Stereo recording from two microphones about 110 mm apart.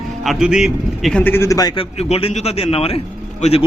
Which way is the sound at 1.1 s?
20° left (ahead or behind).